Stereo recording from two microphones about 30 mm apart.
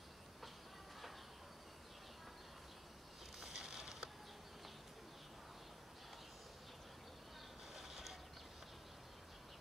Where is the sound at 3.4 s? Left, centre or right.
Centre.